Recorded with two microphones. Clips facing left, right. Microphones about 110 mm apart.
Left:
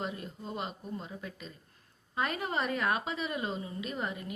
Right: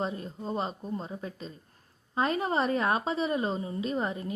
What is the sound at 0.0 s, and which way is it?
A woman's voice, 30° right (ahead or behind).